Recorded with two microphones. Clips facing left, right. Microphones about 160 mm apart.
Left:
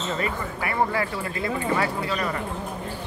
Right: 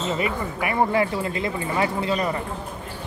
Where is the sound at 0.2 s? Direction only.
15° right (ahead or behind).